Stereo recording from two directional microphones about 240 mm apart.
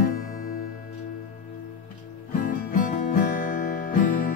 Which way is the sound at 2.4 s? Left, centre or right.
Left.